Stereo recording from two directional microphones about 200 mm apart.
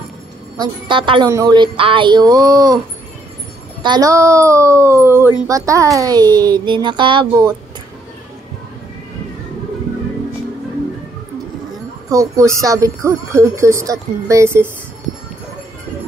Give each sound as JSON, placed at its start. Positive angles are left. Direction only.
{"t": 0.6, "sound": "speech", "side_deg": -25}
{"t": 3.8, "sound": "speech", "side_deg": -20}
{"t": 12.1, "sound": "speech", "side_deg": -15}